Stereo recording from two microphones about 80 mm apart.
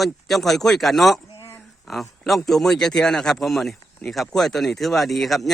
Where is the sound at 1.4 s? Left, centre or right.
Left.